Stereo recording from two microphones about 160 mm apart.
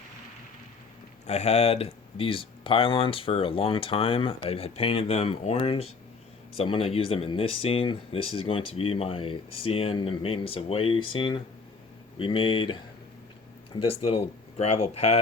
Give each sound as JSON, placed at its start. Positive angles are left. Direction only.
{"t": 1.3, "sound": "speech", "side_deg": 45}
{"t": 13.8, "sound": "speech", "side_deg": 40}